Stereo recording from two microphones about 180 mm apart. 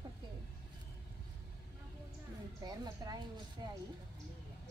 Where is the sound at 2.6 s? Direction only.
20° right (ahead or behind).